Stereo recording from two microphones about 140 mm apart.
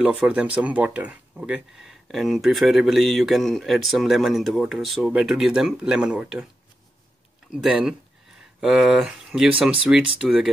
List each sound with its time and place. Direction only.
0.0 s speech: 10° right (ahead or behind)
7.6 s speech: 5° right (ahead or behind)